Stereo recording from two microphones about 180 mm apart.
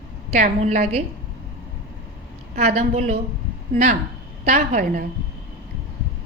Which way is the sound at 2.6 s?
40° right (ahead or behind).